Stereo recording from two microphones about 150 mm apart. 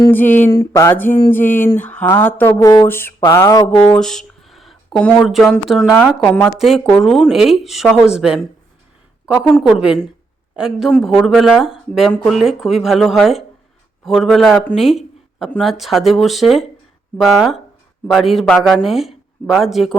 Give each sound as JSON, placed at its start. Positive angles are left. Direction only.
{"t": 0.0, "sound": "mantra", "side_deg": 10}
{"t": 3.9, "sound": "speech", "side_deg": 5}
{"t": 14.8, "sound": "a sound", "side_deg": 0}
{"t": 15.4, "sound": "mantra", "side_deg": 5}
{"t": 15.8, "sound": "speech", "side_deg": 0}